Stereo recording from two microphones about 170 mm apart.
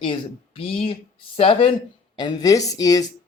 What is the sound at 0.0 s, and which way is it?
Speech, 30° left (ahead or behind).